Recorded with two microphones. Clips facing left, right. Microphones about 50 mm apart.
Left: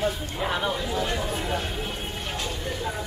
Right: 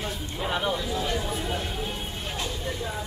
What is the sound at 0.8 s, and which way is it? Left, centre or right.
Speech, left.